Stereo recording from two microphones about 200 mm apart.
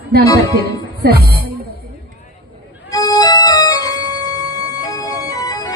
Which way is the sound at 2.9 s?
20° left (ahead or behind).